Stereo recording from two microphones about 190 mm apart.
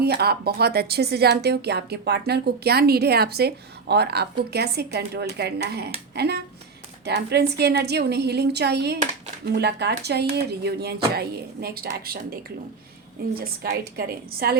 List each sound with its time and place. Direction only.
0.0 s speech: 55° right (ahead or behind)
13.4 s a woman's voice: 55° right (ahead or behind)